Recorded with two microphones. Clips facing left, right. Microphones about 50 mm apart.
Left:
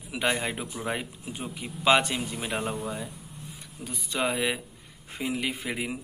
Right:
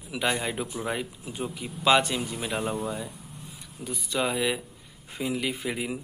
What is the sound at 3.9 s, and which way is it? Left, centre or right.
A man's voice, left.